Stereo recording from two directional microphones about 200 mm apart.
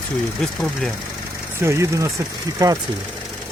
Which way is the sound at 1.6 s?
15° right (ahead or behind).